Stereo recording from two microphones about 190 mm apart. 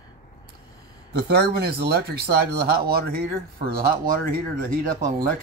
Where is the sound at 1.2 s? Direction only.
60° right (ahead or behind).